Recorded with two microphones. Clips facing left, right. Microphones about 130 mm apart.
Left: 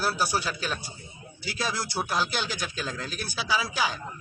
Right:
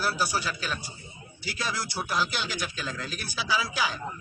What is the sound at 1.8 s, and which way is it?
Speech, 25° left (ahead or behind).